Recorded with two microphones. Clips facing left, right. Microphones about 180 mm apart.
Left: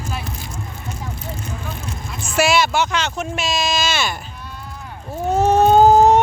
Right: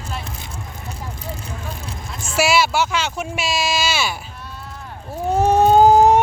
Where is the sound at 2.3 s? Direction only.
5° right (ahead or behind).